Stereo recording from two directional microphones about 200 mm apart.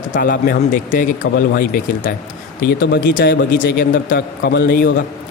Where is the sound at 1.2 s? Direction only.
55° left (ahead or behind).